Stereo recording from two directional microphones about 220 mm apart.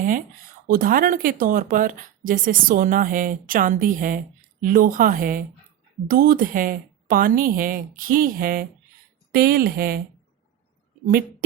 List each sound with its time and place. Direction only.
0.7 s speech: 40° right (ahead or behind)